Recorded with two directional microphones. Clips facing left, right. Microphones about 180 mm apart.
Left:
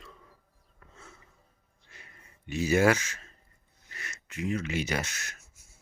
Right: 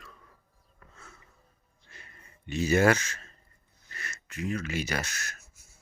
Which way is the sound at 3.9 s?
15° left (ahead or behind).